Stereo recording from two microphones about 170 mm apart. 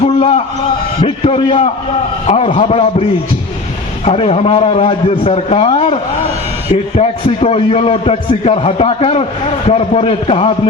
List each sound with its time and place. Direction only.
0.0 s a sound: 35° left (ahead or behind)
1.0 s a man's voice: 35° left (ahead or behind)
4.0 s a man's voice: 35° left (ahead or behind)